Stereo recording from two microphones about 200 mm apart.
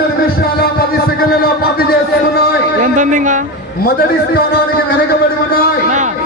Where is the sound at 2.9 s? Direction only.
40° right (ahead or behind).